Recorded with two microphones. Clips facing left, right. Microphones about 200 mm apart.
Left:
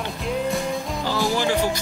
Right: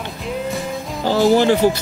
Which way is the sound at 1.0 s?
50° right (ahead or behind).